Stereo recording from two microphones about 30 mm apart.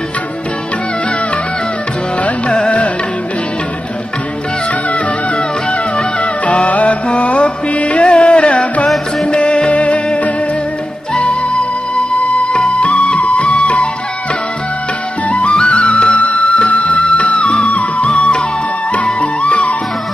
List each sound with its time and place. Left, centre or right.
6.4 s music: left
11.9 s music: left
15.2 s music: left